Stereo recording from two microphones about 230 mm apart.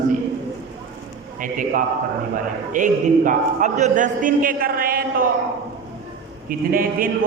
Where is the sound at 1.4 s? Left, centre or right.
Right.